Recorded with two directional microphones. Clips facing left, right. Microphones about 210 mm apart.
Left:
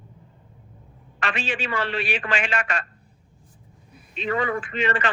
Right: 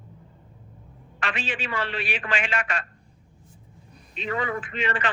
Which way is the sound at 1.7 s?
65° left (ahead or behind).